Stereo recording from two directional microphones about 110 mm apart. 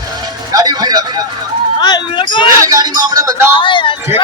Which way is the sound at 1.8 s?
40° left (ahead or behind).